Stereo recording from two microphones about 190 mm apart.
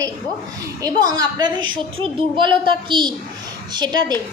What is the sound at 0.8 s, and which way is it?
A woman's voice, 20° right (ahead or behind).